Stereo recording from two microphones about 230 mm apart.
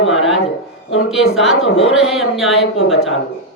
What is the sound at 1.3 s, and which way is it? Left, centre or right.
Speech, centre.